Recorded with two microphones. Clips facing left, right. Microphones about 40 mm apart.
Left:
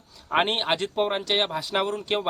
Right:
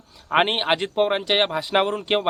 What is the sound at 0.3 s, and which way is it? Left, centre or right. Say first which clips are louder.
Speech: right 3 dB; right.